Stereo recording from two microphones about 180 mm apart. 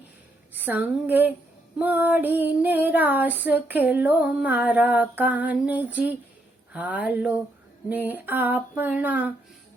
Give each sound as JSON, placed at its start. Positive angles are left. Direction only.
{"t": 0.5, "sound": "speech", "side_deg": -10}
{"t": 1.8, "sound": "female singing", "side_deg": -10}